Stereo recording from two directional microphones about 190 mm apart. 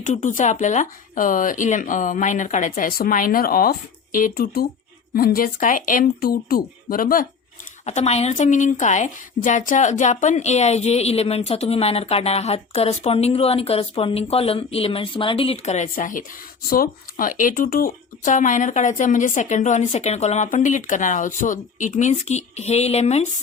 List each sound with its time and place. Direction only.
0.0 s speech: 40° left (ahead or behind)
7.9 s a woman's voice: 35° left (ahead or behind)